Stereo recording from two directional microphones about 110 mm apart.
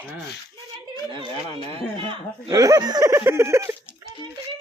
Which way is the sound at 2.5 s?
30° right (ahead or behind).